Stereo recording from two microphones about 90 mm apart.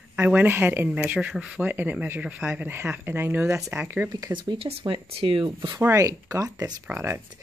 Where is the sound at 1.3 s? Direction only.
5° right (ahead or behind).